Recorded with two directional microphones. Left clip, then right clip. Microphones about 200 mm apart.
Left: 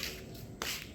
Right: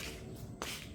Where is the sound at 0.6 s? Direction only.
60° left (ahead or behind).